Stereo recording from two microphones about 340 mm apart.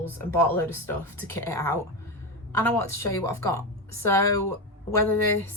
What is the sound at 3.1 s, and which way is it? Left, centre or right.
Speech, left.